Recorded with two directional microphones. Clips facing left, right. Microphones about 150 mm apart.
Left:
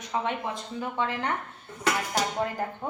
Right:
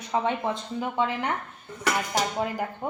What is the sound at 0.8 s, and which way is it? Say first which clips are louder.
Speech: right 2 dB; 15° right (ahead or behind).